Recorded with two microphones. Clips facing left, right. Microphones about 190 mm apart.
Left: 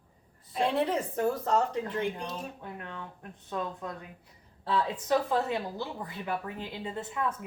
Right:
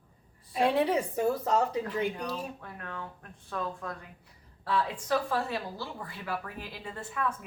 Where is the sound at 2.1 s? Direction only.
20° left (ahead or behind).